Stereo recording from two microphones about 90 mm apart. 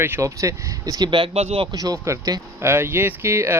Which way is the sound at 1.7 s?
40° right (ahead or behind).